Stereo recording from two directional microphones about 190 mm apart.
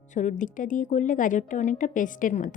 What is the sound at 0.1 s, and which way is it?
A woman's voice, 40° left (ahead or behind).